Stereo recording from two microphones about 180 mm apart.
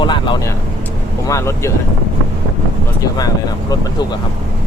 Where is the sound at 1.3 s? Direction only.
15° left (ahead or behind).